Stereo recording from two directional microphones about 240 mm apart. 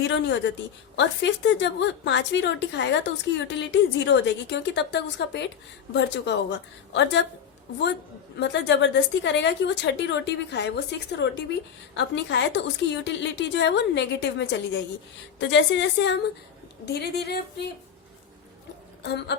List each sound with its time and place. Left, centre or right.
0.1 s a woman's voice: left
8.4 s a woman's voice: left
19.0 s a woman's voice: left